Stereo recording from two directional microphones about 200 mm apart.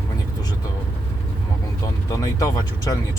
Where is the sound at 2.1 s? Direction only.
15° left (ahead or behind).